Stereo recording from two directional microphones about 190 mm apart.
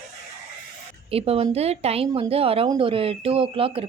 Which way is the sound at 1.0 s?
30° right (ahead or behind).